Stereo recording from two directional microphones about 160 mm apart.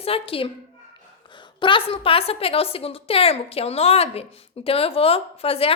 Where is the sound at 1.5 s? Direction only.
30° left (ahead or behind).